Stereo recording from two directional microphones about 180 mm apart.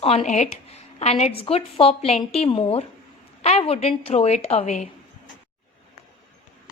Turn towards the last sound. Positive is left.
turn(degrees=35)  # may be behind; listen again after turning